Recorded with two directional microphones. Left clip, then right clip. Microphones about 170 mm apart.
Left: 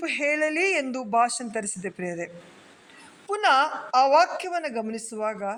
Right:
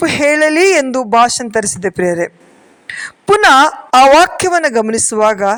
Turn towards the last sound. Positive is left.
turn(degrees=-50)  # may be behind; listen again after turning